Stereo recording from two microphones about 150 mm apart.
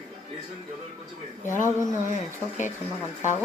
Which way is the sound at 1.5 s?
55° left (ahead or behind).